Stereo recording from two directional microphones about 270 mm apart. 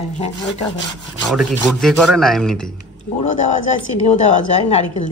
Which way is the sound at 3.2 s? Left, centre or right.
Left.